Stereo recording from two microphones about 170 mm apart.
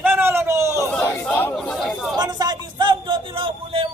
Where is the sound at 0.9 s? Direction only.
5° left (ahead or behind).